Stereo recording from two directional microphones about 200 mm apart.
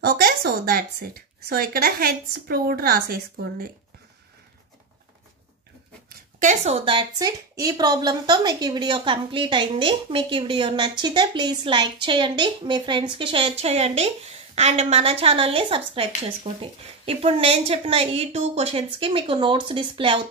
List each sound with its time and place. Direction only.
0.0 s a woman's voice: 50° right (ahead or behind)
6.0 s speech: 35° right (ahead or behind)